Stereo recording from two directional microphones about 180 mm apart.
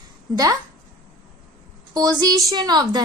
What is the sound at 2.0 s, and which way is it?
A woman's voice, 20° right (ahead or behind).